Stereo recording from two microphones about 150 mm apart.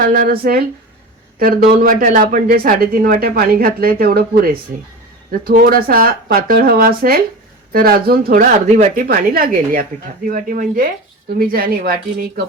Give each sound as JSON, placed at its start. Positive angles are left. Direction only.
{"t": 0.0, "sound": "a man's voice", "side_deg": -70}
{"t": 9.0, "sound": "speech", "side_deg": -75}
{"t": 11.3, "sound": "speech", "side_deg": -85}